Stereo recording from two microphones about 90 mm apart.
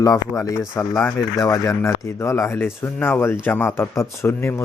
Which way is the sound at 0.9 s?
5° left (ahead or behind).